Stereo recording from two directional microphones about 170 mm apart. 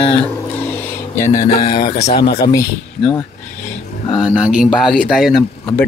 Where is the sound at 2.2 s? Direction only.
70° left (ahead or behind).